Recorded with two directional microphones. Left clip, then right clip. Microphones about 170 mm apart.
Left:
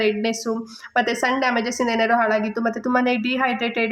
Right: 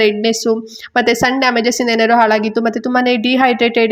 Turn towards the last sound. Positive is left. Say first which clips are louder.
# right 9 dB
turn(degrees=-30)  # may be behind; listen again after turning